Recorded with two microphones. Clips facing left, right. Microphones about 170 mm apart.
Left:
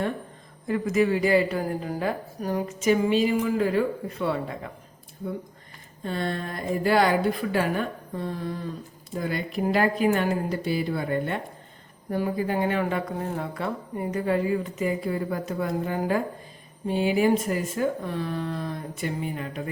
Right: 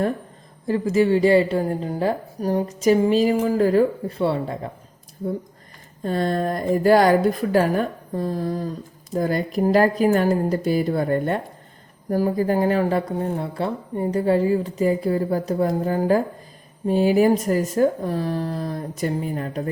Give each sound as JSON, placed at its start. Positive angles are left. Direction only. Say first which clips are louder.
{"t": 0.7, "sound": "speech", "louder": "right 4 dB", "side_deg": -30}
{"t": 6.0, "sound": "speech", "louder": "right 7 dB", "side_deg": -40}